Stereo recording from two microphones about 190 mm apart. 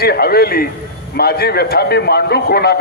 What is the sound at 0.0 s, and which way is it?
A man's voice, 55° left (ahead or behind).